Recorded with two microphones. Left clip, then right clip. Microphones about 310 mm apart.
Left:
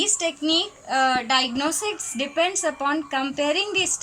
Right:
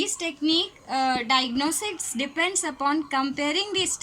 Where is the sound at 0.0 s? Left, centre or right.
Right.